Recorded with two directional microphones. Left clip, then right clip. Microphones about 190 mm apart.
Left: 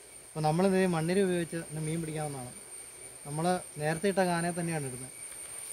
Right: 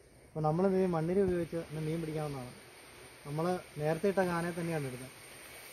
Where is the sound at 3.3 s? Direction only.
20° left (ahead or behind).